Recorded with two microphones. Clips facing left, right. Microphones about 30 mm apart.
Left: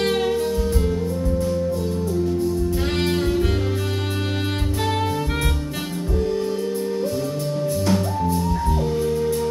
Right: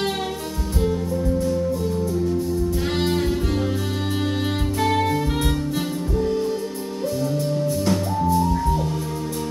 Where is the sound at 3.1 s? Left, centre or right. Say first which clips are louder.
Left 1 dB; centre.